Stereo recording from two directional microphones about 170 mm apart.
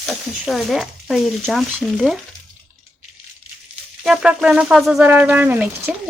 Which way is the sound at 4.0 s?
5° right (ahead or behind).